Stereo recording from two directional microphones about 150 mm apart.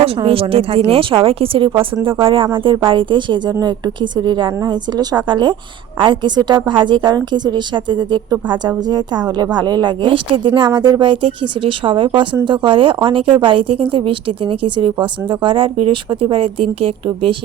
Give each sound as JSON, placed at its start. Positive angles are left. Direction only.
{"t": 0.0, "sound": "speech", "side_deg": -40}